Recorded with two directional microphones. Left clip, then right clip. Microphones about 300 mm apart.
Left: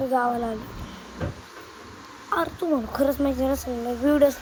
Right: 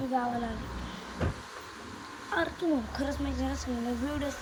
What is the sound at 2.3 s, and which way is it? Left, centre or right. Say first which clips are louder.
Speech: left 6 dB; centre.